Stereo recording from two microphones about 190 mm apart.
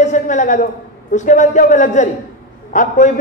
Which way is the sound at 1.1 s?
40° left (ahead or behind).